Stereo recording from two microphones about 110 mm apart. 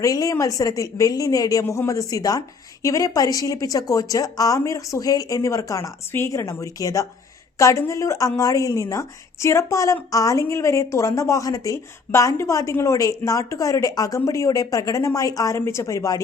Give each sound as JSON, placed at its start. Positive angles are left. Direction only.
{"t": 0.0, "sound": "a woman's voice", "side_deg": 30}